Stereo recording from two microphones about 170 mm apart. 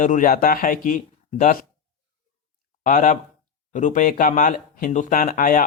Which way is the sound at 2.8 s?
50° left (ahead or behind).